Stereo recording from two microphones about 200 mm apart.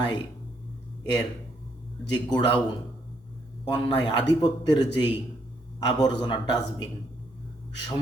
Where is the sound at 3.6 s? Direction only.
20° left (ahead or behind).